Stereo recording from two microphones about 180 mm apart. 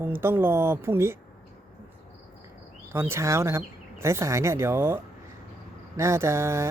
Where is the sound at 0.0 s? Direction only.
15° right (ahead or behind).